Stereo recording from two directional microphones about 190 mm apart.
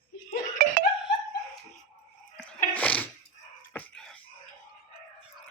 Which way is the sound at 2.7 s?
10° left (ahead or behind).